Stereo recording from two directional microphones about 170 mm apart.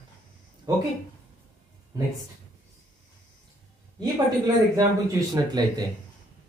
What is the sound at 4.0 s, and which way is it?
Speech, 20° right (ahead or behind).